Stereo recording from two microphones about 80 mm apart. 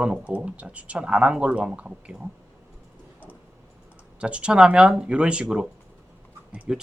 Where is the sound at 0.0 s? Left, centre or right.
Centre.